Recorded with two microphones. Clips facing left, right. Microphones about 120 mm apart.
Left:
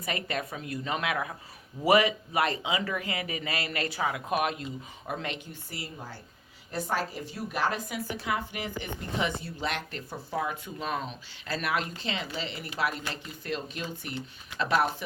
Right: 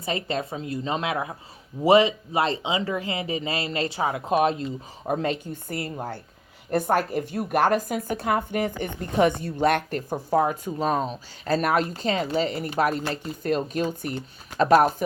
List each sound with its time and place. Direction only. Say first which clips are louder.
0.0 s a woman's voice: right 5 dB; 30° right (ahead or behind)
5.5 s a woman's voice: right 10 dB; 55° right (ahead or behind)